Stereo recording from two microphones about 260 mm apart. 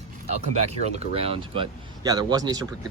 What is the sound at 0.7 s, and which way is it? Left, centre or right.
Speech, right.